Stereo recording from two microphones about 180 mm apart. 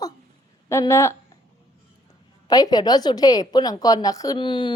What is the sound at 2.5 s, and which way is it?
A woman's voice, 20° left (ahead or behind).